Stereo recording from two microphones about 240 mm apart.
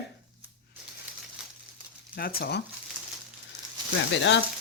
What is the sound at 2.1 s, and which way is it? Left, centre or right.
Speech, left.